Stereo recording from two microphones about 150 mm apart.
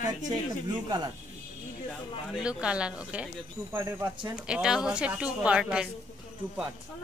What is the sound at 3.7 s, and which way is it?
Speech, 20° right (ahead or behind).